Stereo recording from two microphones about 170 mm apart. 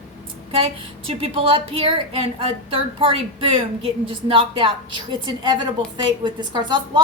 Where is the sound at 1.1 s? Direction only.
30° right (ahead or behind).